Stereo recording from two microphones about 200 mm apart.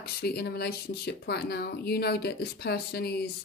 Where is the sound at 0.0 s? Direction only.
50° left (ahead or behind).